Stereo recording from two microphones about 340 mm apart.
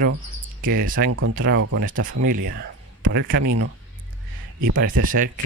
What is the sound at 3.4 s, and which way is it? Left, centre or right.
Speech, right.